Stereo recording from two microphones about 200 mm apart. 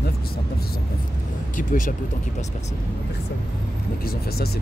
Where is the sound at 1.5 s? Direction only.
40° left (ahead or behind).